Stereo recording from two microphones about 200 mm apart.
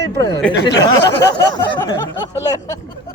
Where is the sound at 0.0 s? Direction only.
15° left (ahead or behind).